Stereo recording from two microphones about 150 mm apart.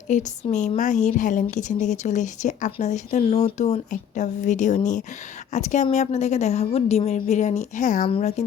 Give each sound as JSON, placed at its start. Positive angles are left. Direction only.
{"t": 0.1, "sound": "a woman's voice", "side_deg": 55}
{"t": 8.0, "sound": "speech", "side_deg": 45}